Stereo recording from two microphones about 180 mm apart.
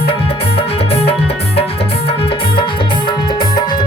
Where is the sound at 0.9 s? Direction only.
35° left (ahead or behind).